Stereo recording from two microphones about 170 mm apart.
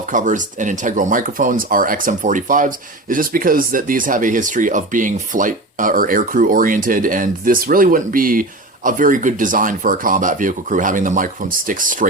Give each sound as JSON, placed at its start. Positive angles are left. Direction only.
{"t": 0.0, "sound": "speech", "side_deg": -50}